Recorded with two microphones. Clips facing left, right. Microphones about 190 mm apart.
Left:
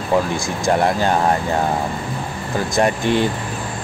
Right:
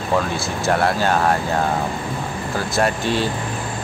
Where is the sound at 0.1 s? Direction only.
15° left (ahead or behind).